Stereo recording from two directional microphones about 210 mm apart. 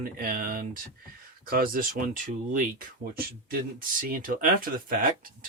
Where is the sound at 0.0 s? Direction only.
40° right (ahead or behind).